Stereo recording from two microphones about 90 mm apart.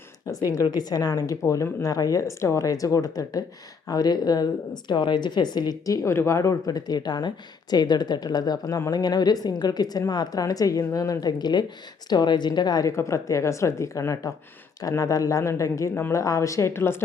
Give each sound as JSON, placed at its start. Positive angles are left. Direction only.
{"t": 0.5, "sound": "speech", "side_deg": 45}
{"t": 4.9, "sound": "speech", "side_deg": 60}
{"t": 12.9, "sound": "speech", "side_deg": 30}